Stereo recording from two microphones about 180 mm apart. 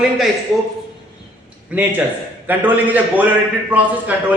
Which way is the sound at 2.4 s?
10° right (ahead or behind).